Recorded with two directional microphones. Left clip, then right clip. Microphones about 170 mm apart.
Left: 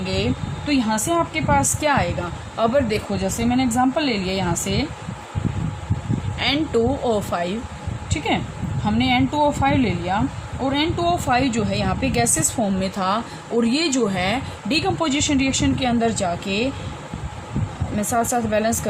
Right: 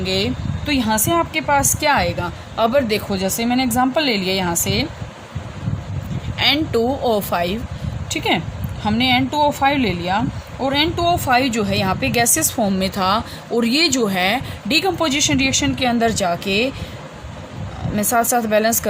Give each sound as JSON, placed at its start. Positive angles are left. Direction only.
{"t": 0.0, "sound": "speech", "side_deg": -50}
{"t": 6.4, "sound": "a woman's voice", "side_deg": -50}
{"t": 8.1, "sound": "speech", "side_deg": -60}
{"t": 17.9, "sound": "a woman's voice", "side_deg": -55}